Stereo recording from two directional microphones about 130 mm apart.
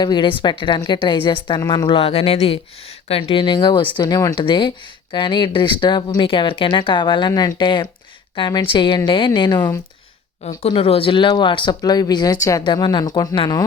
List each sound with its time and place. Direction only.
0.0 s speech: 35° left (ahead or behind)
1.9 s speech: 50° left (ahead or behind)
10.4 s speech: 55° left (ahead or behind); by 13.7 s 35° left (ahead or behind)